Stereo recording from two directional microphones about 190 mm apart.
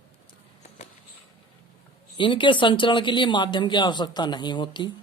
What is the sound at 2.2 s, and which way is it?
Speech, 25° left (ahead or behind).